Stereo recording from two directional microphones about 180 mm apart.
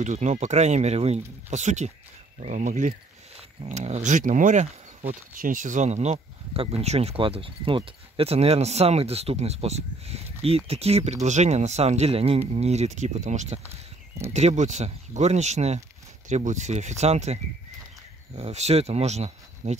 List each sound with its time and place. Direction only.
0.0 s speech: 40° right (ahead or behind)